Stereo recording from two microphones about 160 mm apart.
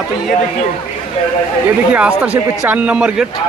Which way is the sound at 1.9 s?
5° right (ahead or behind).